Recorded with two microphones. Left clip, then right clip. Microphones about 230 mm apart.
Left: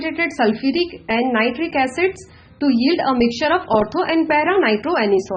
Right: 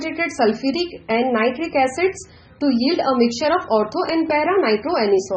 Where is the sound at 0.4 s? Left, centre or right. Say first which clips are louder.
Even; left.